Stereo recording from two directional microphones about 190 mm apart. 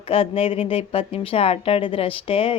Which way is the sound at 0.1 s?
30° left (ahead or behind).